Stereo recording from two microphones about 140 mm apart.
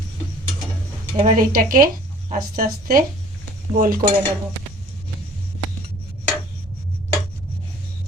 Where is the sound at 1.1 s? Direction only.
70° right (ahead or behind); by 1.9 s 90° right.